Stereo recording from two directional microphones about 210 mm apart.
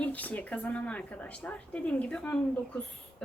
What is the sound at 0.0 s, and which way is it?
A woman's voice, 5° left (ahead or behind).